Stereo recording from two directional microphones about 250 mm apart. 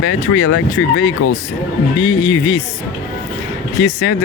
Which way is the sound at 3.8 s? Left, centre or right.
Left.